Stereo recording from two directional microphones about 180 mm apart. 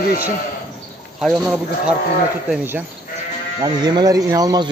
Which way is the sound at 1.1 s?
5° right (ahead or behind).